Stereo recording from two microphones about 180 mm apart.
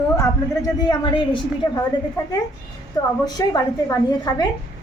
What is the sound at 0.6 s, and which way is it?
A woman's voice, 20° left (ahead or behind).